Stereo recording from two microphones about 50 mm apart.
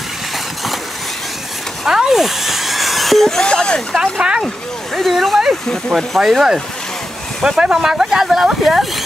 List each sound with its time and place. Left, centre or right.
1.9 s a sound: centre
3.9 s speech: centre
4.9 s speech: centre